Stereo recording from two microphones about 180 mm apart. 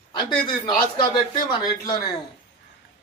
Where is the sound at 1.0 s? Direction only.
25° left (ahead or behind).